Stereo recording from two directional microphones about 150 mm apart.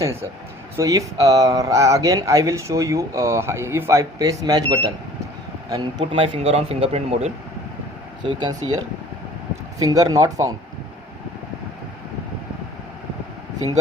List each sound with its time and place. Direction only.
0.0 s speech: 20° right (ahead or behind); by 7.3 s 45° right (ahead or behind)
8.2 s speech: 30° right (ahead or behind)
9.8 s speech: 25° right (ahead or behind)